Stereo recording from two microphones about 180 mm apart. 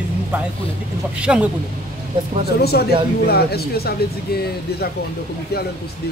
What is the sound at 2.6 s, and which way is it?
Speech, 60° left (ahead or behind).